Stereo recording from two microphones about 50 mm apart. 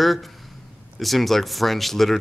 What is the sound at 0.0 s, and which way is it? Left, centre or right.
Speech, centre.